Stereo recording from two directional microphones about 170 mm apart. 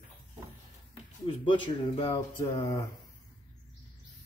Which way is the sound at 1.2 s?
30° left (ahead or behind).